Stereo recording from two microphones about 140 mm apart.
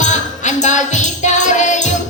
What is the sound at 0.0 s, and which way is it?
Music, 60° left (ahead or behind).